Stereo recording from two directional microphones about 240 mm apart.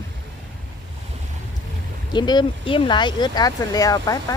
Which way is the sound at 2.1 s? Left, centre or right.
Centre.